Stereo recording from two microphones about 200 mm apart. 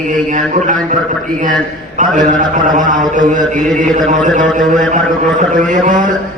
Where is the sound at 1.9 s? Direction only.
40° right (ahead or behind).